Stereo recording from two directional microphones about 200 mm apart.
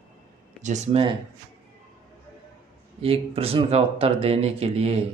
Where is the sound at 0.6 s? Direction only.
35° right (ahead or behind).